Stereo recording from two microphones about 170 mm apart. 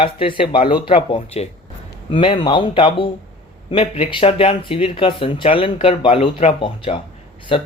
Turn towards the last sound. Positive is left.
turn(degrees=35)  # may be behind; listen again after turning